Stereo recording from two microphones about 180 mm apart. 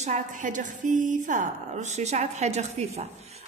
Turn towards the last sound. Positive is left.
turn(degrees=-35)  # may be behind; listen again after turning